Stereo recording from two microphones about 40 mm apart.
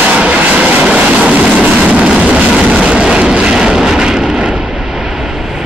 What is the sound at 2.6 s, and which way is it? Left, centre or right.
Vehicle, right.